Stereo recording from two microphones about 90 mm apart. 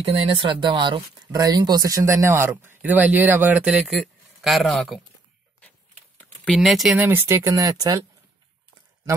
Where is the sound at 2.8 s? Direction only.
15° right (ahead or behind).